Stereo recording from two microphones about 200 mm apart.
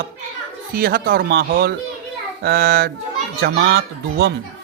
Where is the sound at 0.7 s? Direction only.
50° right (ahead or behind).